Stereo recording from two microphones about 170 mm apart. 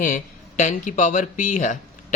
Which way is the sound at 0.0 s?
50° left (ahead or behind).